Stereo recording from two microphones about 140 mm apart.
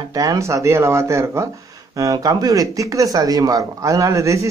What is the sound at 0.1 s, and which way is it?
Speech, 25° right (ahead or behind).